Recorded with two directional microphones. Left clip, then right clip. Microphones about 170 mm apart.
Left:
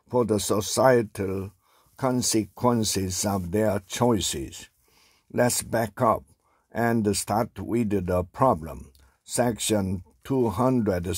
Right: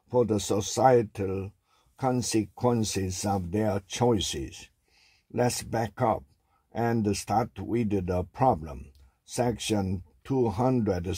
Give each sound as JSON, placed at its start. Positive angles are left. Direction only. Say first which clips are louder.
{"t": 0.1, "sound": "speech", "louder": "left 2 dB", "side_deg": 25}
{"t": 5.3, "sound": "speech", "louder": "left 4 dB", "side_deg": 25}